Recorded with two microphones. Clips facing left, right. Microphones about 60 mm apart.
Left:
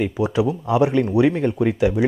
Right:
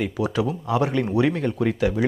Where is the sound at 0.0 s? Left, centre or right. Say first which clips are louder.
Left 4 dB; centre.